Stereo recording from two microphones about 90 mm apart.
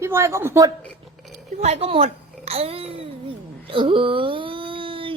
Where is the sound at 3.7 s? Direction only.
75° right (ahead or behind).